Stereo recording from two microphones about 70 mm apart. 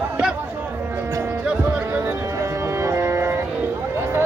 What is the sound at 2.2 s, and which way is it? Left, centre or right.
Music, right.